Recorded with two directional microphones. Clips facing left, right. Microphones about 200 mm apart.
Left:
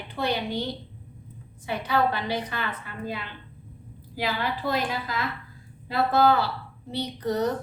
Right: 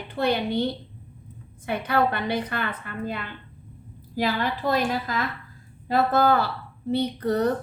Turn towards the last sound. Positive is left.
turn(degrees=-55)  # may be behind; listen again after turning